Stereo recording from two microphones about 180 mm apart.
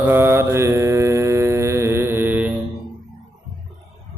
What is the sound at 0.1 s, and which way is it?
Mantra, 10° right (ahead or behind).